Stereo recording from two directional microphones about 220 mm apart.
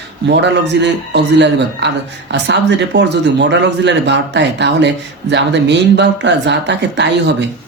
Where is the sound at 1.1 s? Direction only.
50° right (ahead or behind).